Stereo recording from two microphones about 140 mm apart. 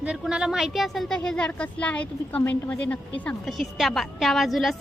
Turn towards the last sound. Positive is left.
turn(degrees=0)  # may be behind; listen again after turning